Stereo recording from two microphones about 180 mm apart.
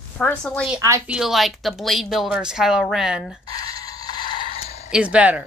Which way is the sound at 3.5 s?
20° left (ahead or behind).